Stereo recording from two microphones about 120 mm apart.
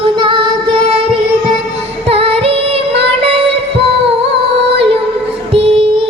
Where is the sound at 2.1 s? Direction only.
50° right (ahead or behind).